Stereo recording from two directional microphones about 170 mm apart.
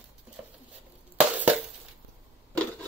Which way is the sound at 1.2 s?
10° right (ahead or behind).